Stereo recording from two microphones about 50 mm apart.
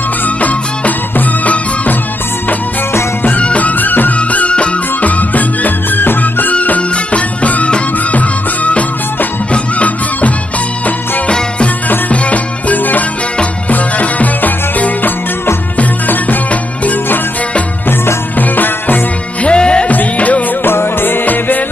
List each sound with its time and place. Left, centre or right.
0.4 s music: left
3.3 s music: left
18.4 s music: left
19.4 s music: centre
19.9 s music: left
20.6 s music: left